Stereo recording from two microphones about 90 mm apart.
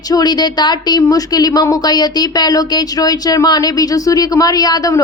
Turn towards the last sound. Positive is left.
turn(degrees=45)  # may be behind; listen again after turning